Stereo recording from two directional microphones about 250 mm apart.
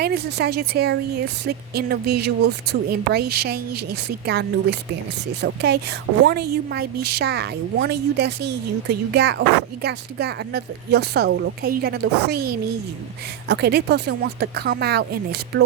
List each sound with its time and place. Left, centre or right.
0.0 s a woman's voice: right